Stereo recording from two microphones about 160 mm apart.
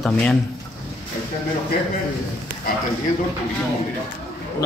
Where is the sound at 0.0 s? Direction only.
Centre (ahead or behind).